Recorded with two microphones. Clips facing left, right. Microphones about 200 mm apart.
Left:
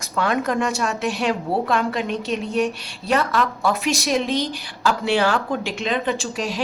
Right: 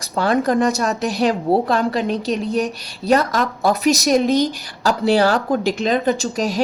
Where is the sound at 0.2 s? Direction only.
35° right (ahead or behind).